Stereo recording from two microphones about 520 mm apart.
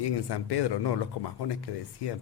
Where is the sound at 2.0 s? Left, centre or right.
Left.